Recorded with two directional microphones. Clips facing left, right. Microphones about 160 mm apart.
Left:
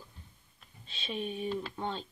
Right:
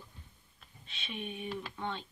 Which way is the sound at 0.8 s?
35° left (ahead or behind).